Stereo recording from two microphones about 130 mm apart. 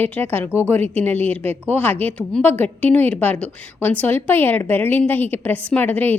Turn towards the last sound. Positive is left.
turn(degrees=15)  # may be behind; listen again after turning